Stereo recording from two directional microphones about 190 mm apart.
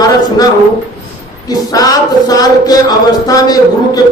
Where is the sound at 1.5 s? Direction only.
20° left (ahead or behind).